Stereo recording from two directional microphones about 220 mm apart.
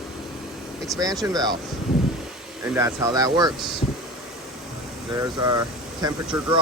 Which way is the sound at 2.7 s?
15° right (ahead or behind).